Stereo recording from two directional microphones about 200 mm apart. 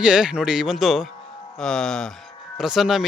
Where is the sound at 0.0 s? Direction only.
5° right (ahead or behind).